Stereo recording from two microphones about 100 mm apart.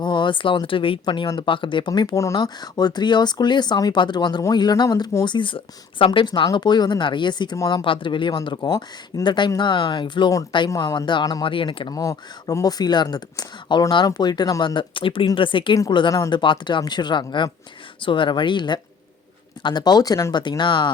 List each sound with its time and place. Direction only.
0.0 s speech: 50° left (ahead or behind)
5.2 s speech: 55° left (ahead or behind)
9.2 s speech: 50° left (ahead or behind)
11.4 s speech: 60° left (ahead or behind)
11.9 s speech: 35° left (ahead or behind)
20.3 s speech: 50° left (ahead or behind)